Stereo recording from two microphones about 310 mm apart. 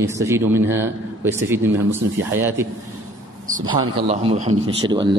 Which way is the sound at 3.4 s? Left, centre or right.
Right.